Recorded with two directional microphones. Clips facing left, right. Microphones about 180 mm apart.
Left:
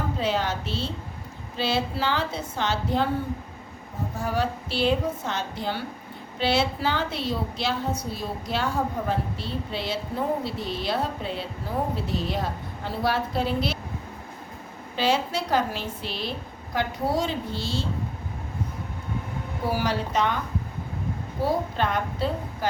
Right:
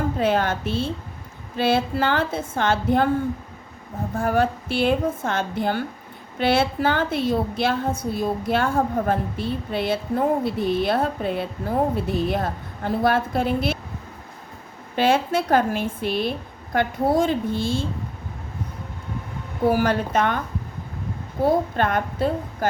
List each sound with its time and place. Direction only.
0.2 s a woman's voice: 55° right (ahead or behind)
4.1 s a woman's voice: 50° right (ahead or behind)
14.9 s a woman's voice: 55° right (ahead or behind)
19.6 s a woman's voice: 55° right (ahead or behind)
21.8 s a woman's voice: 50° right (ahead or behind)